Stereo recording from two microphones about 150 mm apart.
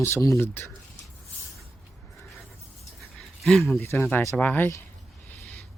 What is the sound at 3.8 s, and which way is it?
Speech, 20° left (ahead or behind).